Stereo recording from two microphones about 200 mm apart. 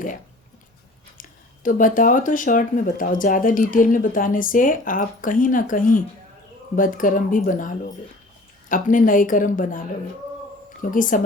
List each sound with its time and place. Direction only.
1.2 s speech: 40° left (ahead or behind)
10.9 s speech: 40° left (ahead or behind)